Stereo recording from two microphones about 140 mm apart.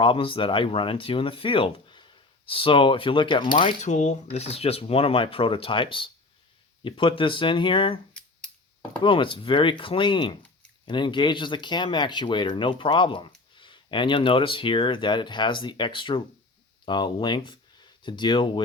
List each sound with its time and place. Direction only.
0.0 s speech: 40° left (ahead or behind)
3.8 s speech: 55° left (ahead or behind); by 7.9 s 40° left (ahead or behind)
9.0 s speech: 35° left (ahead or behind)